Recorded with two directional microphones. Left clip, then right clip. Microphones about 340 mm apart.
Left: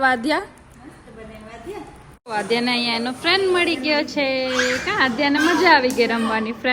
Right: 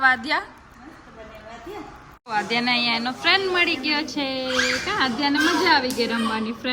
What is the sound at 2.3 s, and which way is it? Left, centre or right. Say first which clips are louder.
A woman's voice: left 1 dB; centre.